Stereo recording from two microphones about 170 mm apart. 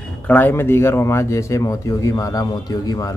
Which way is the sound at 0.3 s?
10° left (ahead or behind).